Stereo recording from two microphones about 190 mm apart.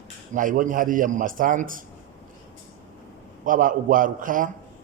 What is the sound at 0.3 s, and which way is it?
Speech, 45° right (ahead or behind).